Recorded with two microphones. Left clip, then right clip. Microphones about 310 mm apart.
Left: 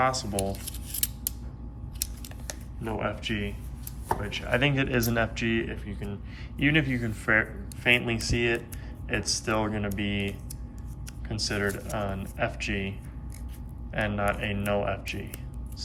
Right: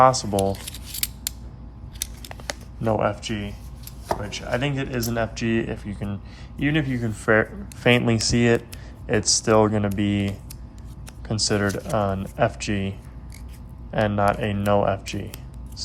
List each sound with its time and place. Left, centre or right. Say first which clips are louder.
0.0 s scissors: right 9 dB; centre
2.9 s speech: right 7 dB; centre
6.6 s speech: right 1 dB; centre
11.3 s speech: right 6 dB; centre
13.9 s speech: right 7 dB; centre